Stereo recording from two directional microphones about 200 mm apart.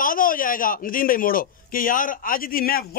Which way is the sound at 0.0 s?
45° left (ahead or behind).